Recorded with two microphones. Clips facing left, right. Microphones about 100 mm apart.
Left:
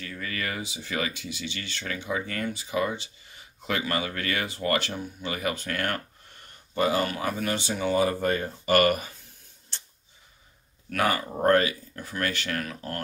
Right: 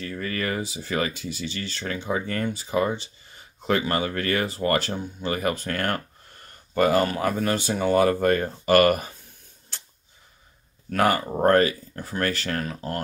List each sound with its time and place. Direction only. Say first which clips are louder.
0.0 s speech: right 5 dB; 40° right (ahead or behind)
10.9 s speech: right 4 dB; 40° right (ahead or behind)